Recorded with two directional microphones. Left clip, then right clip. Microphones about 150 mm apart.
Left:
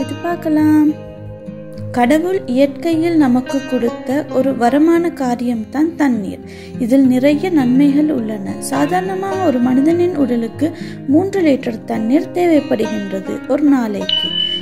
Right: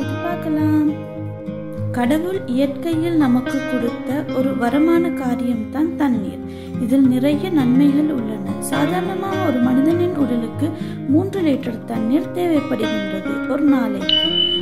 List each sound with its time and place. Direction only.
0.3 s music: 50° left (ahead or behind)
2.0 s speech: 35° left (ahead or behind)
14.1 s speech: centre (ahead or behind)